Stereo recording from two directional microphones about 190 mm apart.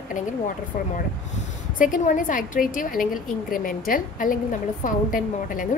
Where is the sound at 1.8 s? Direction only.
45° left (ahead or behind).